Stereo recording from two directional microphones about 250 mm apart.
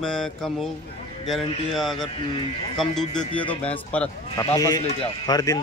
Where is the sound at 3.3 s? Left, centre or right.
Centre.